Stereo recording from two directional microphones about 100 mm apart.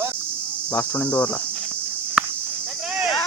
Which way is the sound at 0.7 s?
15° left (ahead or behind).